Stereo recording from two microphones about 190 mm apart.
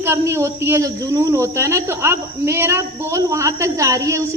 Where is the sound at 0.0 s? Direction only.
15° right (ahead or behind).